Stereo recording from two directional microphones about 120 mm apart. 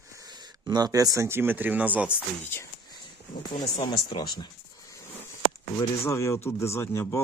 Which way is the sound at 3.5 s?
40° left (ahead or behind).